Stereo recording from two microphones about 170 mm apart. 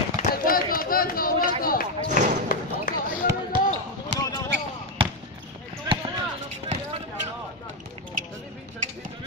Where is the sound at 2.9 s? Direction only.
55° left (ahead or behind).